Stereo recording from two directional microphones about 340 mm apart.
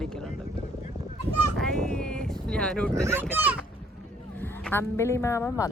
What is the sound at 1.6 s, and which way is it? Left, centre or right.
Speech, centre.